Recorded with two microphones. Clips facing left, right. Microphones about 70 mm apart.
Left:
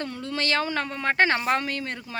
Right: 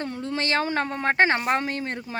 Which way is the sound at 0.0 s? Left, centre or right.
Right.